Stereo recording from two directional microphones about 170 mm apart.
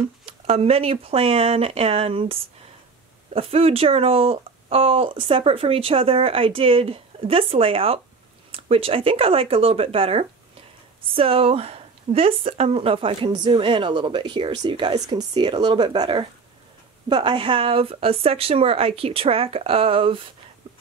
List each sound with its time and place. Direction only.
0.5 s speech: 35° right (ahead or behind)
3.3 s speech: 35° right (ahead or behind)